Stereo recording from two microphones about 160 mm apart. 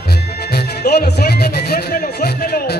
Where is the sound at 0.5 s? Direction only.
85° left.